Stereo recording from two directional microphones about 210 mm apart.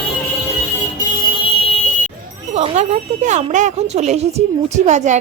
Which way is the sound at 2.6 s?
30° right (ahead or behind).